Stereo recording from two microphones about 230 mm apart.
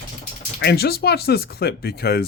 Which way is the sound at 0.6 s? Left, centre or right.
Left.